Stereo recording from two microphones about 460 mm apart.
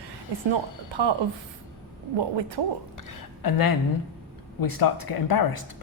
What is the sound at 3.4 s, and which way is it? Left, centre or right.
Speech, left.